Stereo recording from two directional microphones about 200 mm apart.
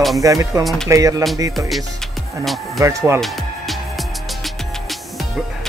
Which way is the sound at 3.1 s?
Centre (ahead or behind).